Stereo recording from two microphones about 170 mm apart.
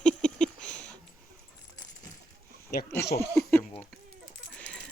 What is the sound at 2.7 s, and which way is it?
Speech, 65° left (ahead or behind).